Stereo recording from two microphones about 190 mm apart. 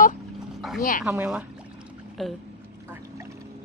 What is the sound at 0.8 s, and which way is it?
Speech, 45° left (ahead or behind).